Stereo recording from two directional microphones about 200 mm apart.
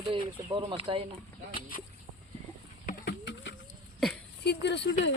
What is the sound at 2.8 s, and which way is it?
Bird, 55° left (ahead or behind).